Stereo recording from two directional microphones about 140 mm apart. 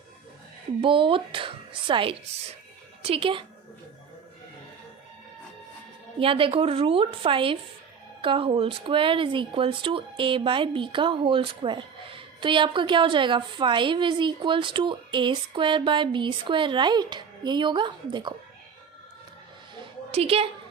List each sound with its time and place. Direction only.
0.8 s speech: 40° right (ahead or behind)
6.1 s speech: 40° right (ahead or behind)
20.1 s a woman's voice: 45° right (ahead or behind)